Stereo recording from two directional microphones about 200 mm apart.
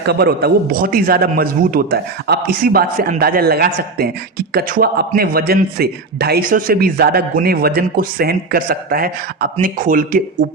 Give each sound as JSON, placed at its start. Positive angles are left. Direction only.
{"t": 0.0, "sound": "a man's voice", "side_deg": -55}